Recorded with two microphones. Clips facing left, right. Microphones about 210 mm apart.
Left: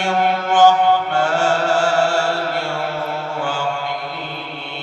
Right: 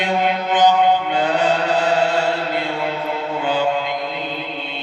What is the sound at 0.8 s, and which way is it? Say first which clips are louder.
Mantra: even; 20° right (ahead or behind).